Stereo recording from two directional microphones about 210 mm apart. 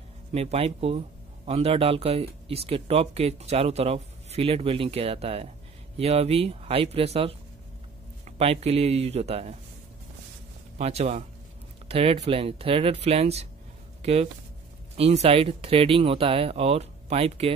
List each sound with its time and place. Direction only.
0.3 s speech: 30° right (ahead or behind)
10.8 s a man's voice: 30° right (ahead or behind)